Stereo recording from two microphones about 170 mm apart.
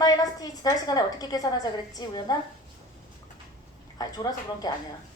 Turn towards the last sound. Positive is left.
turn(degrees=25)  # may be behind; listen again after turning